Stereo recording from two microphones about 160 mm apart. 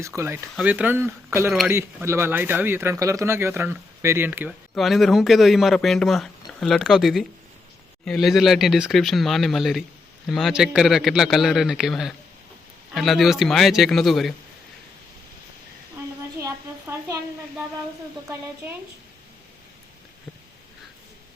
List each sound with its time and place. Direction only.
0.1 s a man's voice: centre (ahead or behind)
4.7 s a man's voice: centre (ahead or behind)
16.4 s a sound: 20° right (ahead or behind)